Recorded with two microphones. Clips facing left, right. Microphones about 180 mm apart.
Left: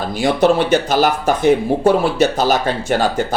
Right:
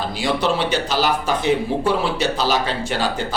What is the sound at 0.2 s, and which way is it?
Speech, 50° left (ahead or behind).